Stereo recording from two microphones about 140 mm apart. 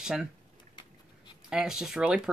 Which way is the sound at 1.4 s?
5° right (ahead or behind).